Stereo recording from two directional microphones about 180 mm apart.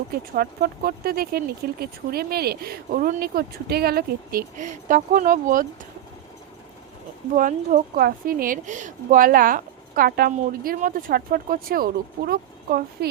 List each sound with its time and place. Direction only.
0.3 s speech: 55° right (ahead or behind)
7.3 s a woman's voice: 45° right (ahead or behind)